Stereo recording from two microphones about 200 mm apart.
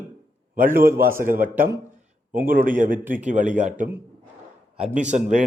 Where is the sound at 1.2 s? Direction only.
45° right (ahead or behind).